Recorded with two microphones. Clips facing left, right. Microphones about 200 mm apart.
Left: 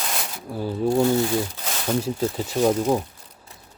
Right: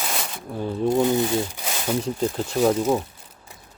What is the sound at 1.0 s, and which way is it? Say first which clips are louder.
Speech: even; 15° right (ahead or behind).